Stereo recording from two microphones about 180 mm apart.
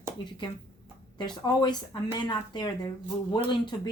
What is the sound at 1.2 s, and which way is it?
Speech, 25° left (ahead or behind).